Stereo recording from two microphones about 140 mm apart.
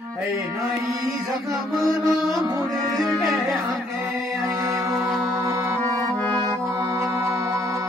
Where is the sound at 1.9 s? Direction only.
Centre (ahead or behind).